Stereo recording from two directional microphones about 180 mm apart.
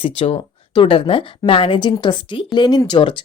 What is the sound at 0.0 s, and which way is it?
Speech, 30° left (ahead or behind).